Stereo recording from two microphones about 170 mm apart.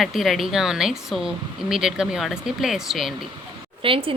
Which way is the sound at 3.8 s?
30° right (ahead or behind).